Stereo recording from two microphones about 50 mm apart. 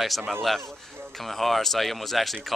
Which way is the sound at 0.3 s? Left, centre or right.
Centre.